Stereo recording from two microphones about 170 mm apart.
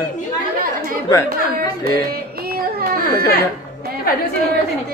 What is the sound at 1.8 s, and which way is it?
Music, 65° right (ahead or behind).